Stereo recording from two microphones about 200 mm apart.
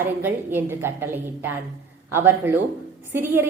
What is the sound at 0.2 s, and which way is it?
A woman's voice, 10° right (ahead or behind).